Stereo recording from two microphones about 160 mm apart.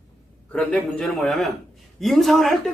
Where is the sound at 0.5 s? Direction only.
5° left (ahead or behind).